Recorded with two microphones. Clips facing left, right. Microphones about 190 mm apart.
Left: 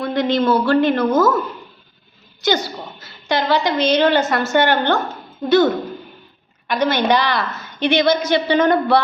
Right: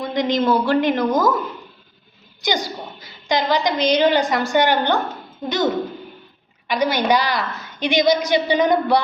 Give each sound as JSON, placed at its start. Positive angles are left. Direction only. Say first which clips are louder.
{"t": 0.0, "sound": "a woman's voice", "louder": "left 2 dB", "side_deg": -20}
{"t": 2.4, "sound": "a woman's voice", "louder": "left 4 dB", "side_deg": -15}